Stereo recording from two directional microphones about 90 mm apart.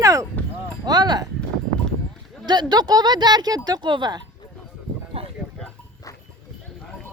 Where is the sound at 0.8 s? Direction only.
50° right (ahead or behind).